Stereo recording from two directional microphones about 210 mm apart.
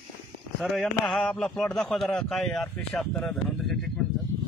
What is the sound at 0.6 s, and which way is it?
A man's voice, centre (ahead or behind).